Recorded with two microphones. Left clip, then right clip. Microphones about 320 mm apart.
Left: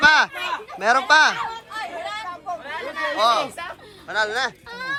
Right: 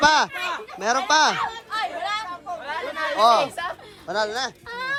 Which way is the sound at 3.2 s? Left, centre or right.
Centre.